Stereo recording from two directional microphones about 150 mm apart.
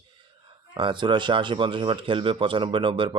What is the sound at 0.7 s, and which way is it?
Speech, 30° right (ahead or behind).